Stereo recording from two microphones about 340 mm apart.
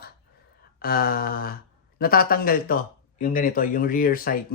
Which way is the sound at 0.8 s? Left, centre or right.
Left.